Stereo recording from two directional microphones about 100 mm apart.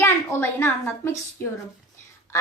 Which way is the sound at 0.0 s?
25° left (ahead or behind).